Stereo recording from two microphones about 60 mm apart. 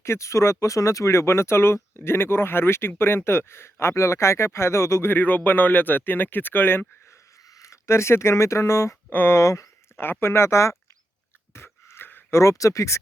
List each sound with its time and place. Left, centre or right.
0.0 s speech: left
5.1 s speech: left
7.6 s speech: left
9.1 s speech: left
9.4 s speech: left
10.0 s speech: left
11.5 s a sound: left
12.4 s speech: left